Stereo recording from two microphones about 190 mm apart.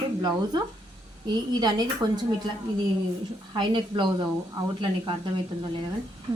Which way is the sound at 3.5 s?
25° right (ahead or behind).